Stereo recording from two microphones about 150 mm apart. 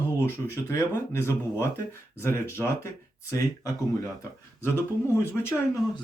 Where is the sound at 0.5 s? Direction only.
20° left (ahead or behind).